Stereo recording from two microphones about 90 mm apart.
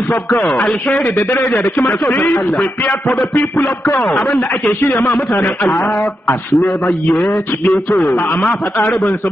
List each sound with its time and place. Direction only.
0.4 s a man's voice: 5° left (ahead or behind)